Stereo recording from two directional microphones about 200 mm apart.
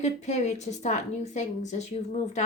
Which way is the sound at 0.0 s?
35° left (ahead or behind).